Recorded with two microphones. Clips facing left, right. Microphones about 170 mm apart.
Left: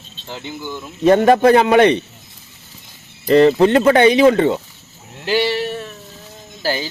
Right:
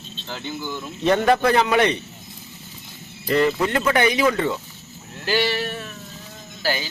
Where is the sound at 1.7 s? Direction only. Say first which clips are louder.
Left 7 dB; 60° left (ahead or behind).